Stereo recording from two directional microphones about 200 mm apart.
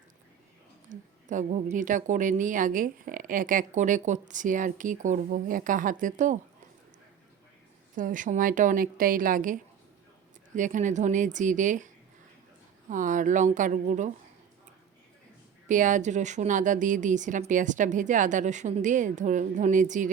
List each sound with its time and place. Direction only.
0.9 s a sound: 40° right (ahead or behind)
1.7 s a woman's voice: 40° right (ahead or behind)
7.9 s a woman's voice: 40° right (ahead or behind)
12.9 s a woman's voice: 40° right (ahead or behind)
15.6 s a woman's voice: 40° right (ahead or behind)